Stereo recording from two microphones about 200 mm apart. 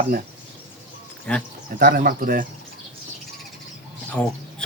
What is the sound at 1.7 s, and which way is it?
Speech, 45° right (ahead or behind).